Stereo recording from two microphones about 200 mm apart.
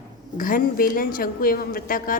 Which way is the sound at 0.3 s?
45° left (ahead or behind).